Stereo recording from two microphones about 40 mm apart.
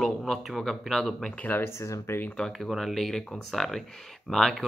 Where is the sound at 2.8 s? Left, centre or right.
Centre.